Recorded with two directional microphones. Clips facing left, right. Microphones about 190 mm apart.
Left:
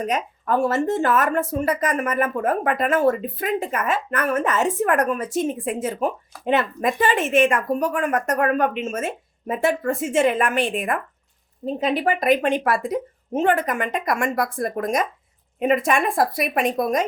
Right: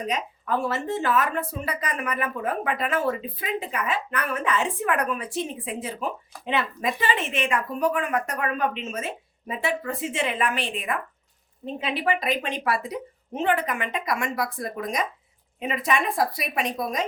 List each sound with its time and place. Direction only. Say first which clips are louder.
0.0 s speech: left 4 dB; 50° left (ahead or behind)